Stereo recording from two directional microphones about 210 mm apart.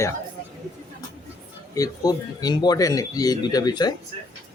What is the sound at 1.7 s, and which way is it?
Speech, 15° left (ahead or behind).